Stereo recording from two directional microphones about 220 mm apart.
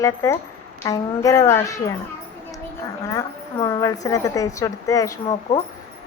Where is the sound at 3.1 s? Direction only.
15° left (ahead or behind).